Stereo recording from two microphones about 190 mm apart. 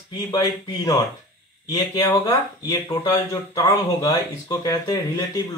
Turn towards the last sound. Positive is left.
turn(degrees=15)  # may be behind; listen again after turning